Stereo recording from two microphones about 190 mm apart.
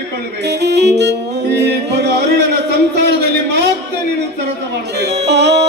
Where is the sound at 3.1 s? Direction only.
60° right (ahead or behind).